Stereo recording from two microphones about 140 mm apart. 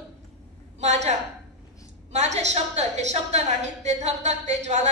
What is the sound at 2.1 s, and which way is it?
A woman's voice, 55° right (ahead or behind).